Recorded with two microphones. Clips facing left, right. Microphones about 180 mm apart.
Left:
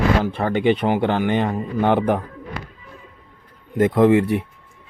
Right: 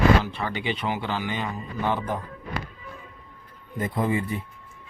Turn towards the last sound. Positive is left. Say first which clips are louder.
# left 11 dB
turn(degrees=75)  # may be behind; listen again after turning